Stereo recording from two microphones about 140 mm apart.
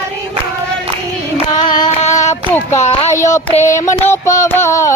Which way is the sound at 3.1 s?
20° left (ahead or behind).